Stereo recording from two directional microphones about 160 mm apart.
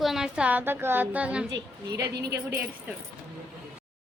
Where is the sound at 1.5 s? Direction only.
90° right.